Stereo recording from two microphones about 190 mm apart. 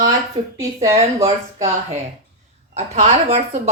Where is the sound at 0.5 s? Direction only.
15° right (ahead or behind).